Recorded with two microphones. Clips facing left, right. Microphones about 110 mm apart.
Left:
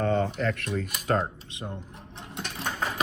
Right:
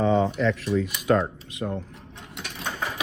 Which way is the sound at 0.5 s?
60° left (ahead or behind).